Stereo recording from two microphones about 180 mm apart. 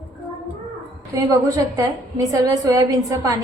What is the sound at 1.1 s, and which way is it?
A woman's voice, 15° right (ahead or behind).